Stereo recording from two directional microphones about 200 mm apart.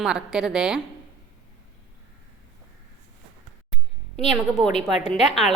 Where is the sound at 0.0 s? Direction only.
5° right (ahead or behind).